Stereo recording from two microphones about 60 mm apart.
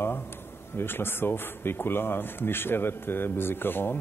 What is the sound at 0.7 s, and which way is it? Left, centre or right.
Speech, left.